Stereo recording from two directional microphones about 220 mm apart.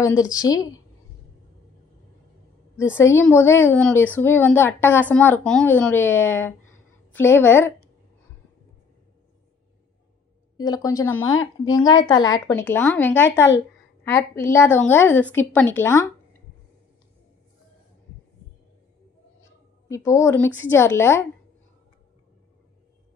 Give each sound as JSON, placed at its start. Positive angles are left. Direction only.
{"t": 0.0, "sound": "a woman's voice", "side_deg": 15}
{"t": 2.9, "sound": "a woman's voice", "side_deg": 10}
{"t": 10.6, "sound": "a woman's voice", "side_deg": 15}
{"t": 19.9, "sound": "a woman's voice", "side_deg": 15}